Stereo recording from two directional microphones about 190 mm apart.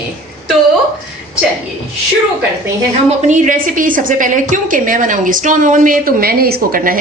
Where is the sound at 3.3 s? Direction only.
45° right (ahead or behind).